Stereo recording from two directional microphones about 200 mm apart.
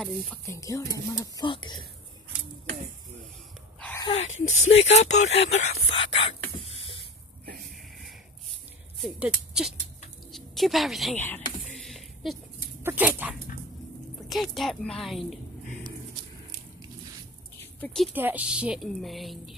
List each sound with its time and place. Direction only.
0.5 s speech: 15° left (ahead or behind)
4.0 s speech: 30° left (ahead or behind)
9.0 s a woman's voice: 5° right (ahead or behind)
11.2 s a sound: 5° left (ahead or behind)
12.8 s dog: 10° right (ahead or behind)
14.3 s a woman's voice: centre (ahead or behind)
17.7 s speech: 5° left (ahead or behind)
18.1 s a woman's voice: 10° right (ahead or behind)